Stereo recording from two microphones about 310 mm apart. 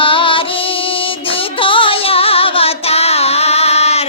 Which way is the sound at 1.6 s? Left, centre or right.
Centre.